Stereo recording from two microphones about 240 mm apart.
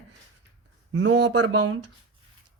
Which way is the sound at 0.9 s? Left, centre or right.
Right.